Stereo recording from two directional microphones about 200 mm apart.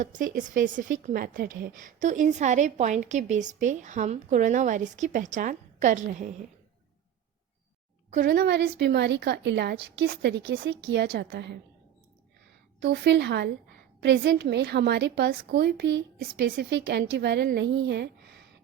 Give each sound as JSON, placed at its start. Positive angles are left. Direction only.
{"t": 0.0, "sound": "a woman's voice", "side_deg": -40}
{"t": 8.1, "sound": "a woman's voice", "side_deg": -50}
{"t": 12.8, "sound": "a woman's voice", "side_deg": -60}